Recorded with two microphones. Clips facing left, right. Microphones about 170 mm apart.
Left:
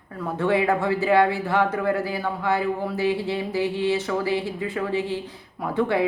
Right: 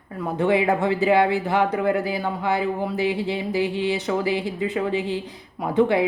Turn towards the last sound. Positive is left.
turn(degrees=-15)  # may be behind; listen again after turning